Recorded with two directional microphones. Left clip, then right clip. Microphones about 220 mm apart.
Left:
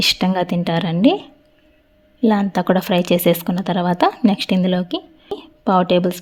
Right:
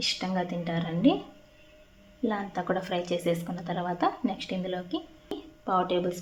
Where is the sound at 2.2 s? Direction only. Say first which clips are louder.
Left 13 dB; 50° left (ahead or behind).